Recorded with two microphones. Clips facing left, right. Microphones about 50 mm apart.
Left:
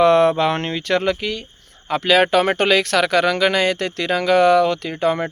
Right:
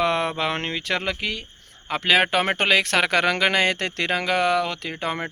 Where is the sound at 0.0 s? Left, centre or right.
Centre; by 4.1 s right.